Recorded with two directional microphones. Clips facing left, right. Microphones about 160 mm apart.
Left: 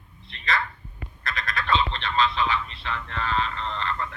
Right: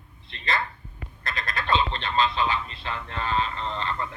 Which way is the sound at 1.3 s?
25° right (ahead or behind).